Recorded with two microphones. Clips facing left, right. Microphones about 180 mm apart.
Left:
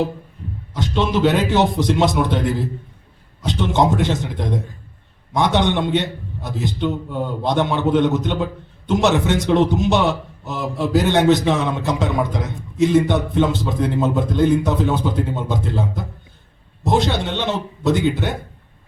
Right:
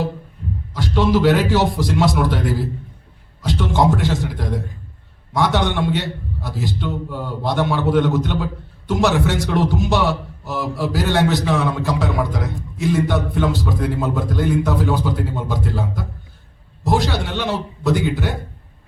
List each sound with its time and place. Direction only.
0.7 s a man's voice: 20° left (ahead or behind)